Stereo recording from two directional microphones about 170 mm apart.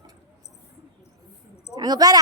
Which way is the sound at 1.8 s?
20° right (ahead or behind).